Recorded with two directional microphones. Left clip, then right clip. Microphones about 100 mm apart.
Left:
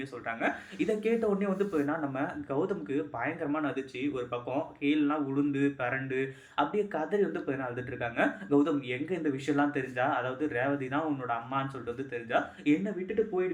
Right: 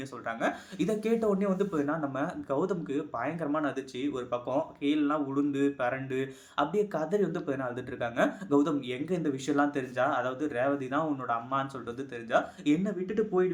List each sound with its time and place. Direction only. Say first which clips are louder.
0.3 s speech: right 1 dB; 45° right (ahead or behind)
5.0 s speech: right 1 dB; 35° right (ahead or behind)